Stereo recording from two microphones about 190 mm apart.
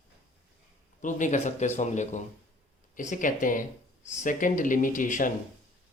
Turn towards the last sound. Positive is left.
turn(degrees=45)  # may be behind; listen again after turning